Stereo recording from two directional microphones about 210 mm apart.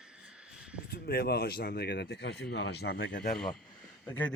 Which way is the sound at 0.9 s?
50° left (ahead or behind).